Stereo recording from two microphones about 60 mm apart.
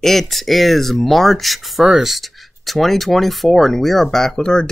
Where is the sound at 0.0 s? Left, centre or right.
Centre.